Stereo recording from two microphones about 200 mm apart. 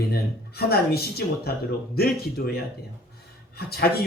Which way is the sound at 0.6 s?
50° left (ahead or behind).